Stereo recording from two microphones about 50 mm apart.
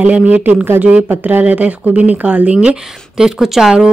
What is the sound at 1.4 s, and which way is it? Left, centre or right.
Speech, right.